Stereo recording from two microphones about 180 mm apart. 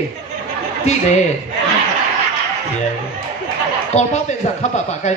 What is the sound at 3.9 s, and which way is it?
Speech, 40° left (ahead or behind).